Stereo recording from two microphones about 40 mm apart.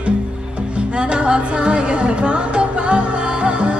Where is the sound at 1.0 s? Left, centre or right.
Right.